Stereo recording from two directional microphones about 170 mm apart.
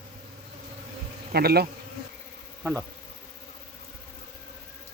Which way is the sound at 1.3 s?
65° right (ahead or behind).